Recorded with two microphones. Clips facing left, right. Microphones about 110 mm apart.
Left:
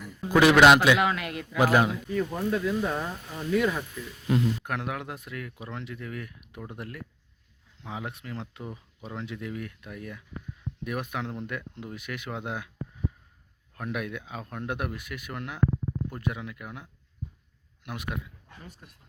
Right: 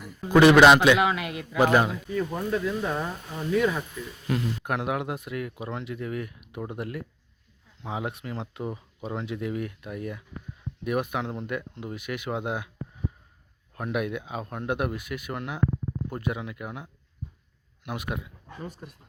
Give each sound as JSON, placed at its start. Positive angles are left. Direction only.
{"t": 0.0, "sound": "a man's voice", "side_deg": 0}
{"t": 4.3, "sound": "speech", "side_deg": 20}
{"t": 4.6, "sound": "speech", "side_deg": -15}
{"t": 13.7, "sound": "speech", "side_deg": -10}